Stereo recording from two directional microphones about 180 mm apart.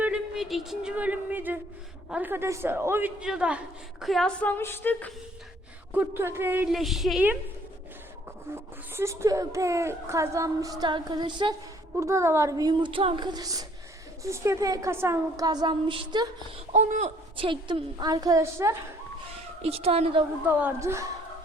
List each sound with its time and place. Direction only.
0.0 s a child's voice: 5° right (ahead or behind)
5.9 s a child's voice: 10° right (ahead or behind)
8.5 s a child's voice: 15° right (ahead or behind)
16.7 s a woman's voice: 40° right (ahead or behind); by 18.8 s 15° right (ahead or behind)
19.6 s a woman's voice: 35° right (ahead or behind)
20.6 s a child's voice: 15° right (ahead or behind)